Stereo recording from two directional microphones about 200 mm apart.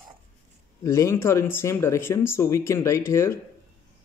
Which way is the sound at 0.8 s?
15° left (ahead or behind).